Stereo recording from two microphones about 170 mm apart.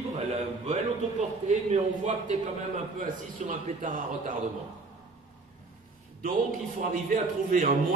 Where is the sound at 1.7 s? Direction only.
45° right (ahead or behind).